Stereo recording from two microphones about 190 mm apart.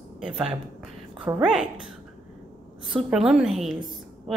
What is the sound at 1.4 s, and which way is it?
Speech, centre (ahead or behind).